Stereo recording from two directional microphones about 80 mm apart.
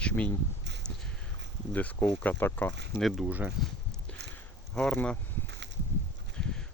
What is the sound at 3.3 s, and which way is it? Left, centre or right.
Speech, centre.